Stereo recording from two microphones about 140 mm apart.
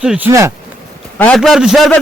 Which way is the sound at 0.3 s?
20° right (ahead or behind).